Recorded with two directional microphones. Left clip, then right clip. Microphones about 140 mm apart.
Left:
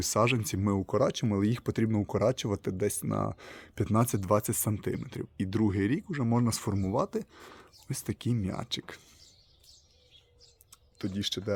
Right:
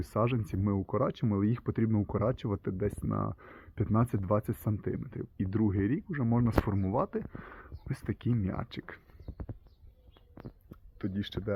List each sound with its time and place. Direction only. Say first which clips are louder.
0.0 s speech: left 5 dB; 25° left (ahead or behind)
0.9 s speech: left 4 dB; 15° left (ahead or behind)
10.7 s speech: left 2 dB; 15° left (ahead or behind)